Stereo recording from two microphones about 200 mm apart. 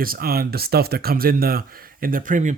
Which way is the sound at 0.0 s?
45° right (ahead or behind).